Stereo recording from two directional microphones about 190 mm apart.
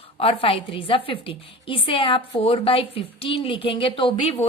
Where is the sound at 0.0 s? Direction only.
30° left (ahead or behind).